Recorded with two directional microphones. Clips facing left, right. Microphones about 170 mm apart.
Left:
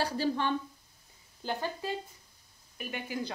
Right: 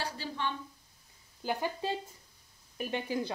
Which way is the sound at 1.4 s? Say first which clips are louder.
Right 1 dB; 10° right (ahead or behind).